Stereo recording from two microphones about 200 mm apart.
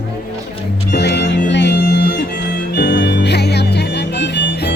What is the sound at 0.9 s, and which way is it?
Music, 60° left (ahead or behind).